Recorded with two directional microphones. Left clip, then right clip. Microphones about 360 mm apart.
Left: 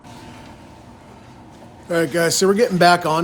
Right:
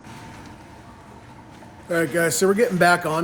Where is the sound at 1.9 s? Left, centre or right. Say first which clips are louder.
Left 3 dB; centre.